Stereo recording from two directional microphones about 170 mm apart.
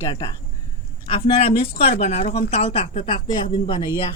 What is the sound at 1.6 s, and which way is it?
Speech, 35° left (ahead or behind).